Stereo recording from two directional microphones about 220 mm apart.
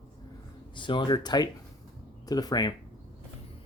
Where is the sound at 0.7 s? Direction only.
20° left (ahead or behind).